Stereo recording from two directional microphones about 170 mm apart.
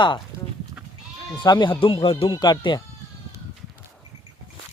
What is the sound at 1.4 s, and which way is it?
Speech, 25° left (ahead or behind).